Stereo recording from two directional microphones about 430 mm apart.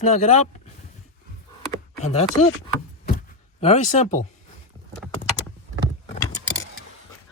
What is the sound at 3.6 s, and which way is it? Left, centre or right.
Speech, centre.